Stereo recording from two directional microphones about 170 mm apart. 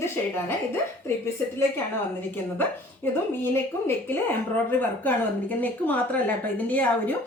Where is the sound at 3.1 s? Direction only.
15° left (ahead or behind).